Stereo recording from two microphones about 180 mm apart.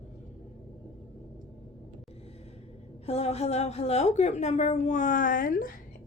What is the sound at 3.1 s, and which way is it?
A woman's voice, 35° left (ahead or behind).